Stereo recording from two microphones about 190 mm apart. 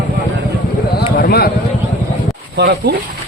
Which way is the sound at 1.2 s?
55° left (ahead or behind).